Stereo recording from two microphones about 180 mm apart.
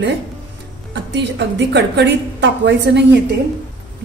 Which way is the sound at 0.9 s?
80° right.